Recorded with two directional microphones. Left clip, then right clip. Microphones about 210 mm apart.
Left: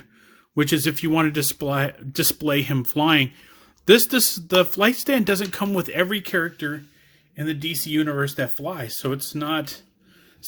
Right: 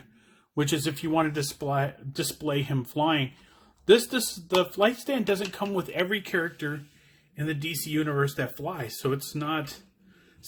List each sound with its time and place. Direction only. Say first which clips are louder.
0.5 s speech: left 6 dB; 30° left (ahead or behind)